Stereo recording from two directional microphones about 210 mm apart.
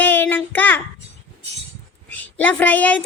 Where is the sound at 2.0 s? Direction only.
10° left (ahead or behind).